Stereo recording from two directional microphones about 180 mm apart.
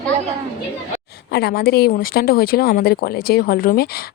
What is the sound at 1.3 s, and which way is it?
Speech, 65° left (ahead or behind).